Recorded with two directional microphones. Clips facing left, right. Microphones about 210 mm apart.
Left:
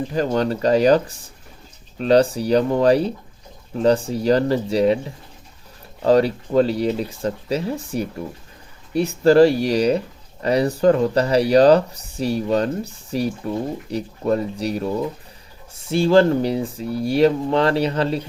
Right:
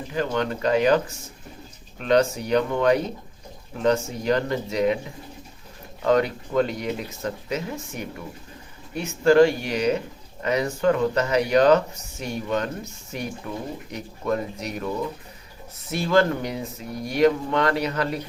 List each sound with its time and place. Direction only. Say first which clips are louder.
0.1 s speech: left 2 dB; 35° left (ahead or behind)